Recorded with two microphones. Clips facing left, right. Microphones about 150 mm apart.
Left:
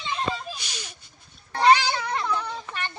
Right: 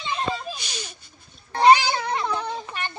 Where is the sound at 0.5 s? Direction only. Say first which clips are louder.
Right 3 dB; 5° left (ahead or behind).